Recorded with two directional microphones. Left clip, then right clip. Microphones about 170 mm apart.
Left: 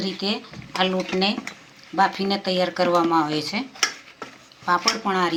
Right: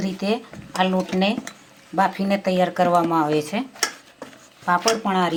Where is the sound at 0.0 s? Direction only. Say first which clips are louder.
Right 2 dB; 55° right (ahead or behind).